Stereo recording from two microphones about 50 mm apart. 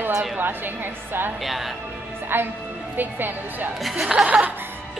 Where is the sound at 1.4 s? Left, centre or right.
Centre.